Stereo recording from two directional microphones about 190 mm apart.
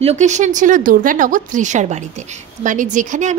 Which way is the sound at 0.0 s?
35° right (ahead or behind).